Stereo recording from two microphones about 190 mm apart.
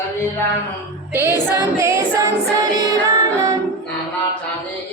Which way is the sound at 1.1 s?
10° right (ahead or behind).